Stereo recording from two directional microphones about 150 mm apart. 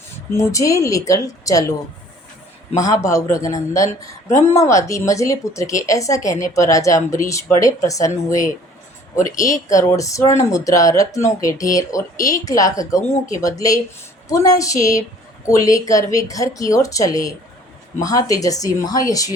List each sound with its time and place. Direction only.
0.3 s speech: 20° left (ahead or behind)
2.7 s speech: 20° left (ahead or behind)